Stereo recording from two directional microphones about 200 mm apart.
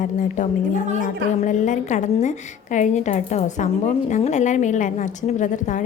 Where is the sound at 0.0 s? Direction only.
40° left (ahead or behind).